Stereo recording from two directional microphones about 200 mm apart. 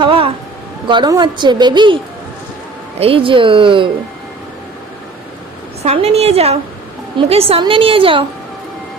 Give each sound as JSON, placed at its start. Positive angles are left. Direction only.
{"t": 0.0, "sound": "a sound", "side_deg": -25}
{"t": 0.9, "sound": "a woman's voice", "side_deg": -20}
{"t": 3.0, "sound": "a woman's voice", "side_deg": -25}
{"t": 5.8, "sound": "a woman's voice", "side_deg": -30}